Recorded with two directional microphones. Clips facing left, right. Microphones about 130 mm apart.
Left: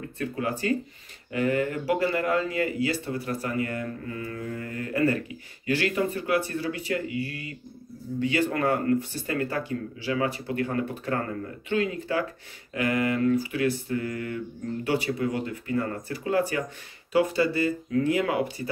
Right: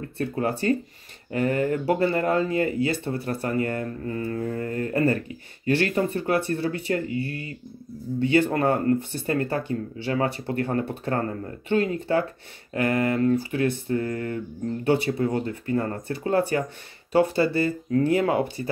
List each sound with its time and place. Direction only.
0.2 s speech: 35° right (ahead or behind)